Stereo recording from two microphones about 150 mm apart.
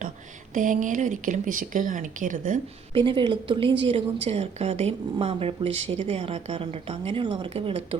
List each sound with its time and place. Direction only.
0.5 s speech: 60° right (ahead or behind)
2.9 s a woman's voice: 35° right (ahead or behind)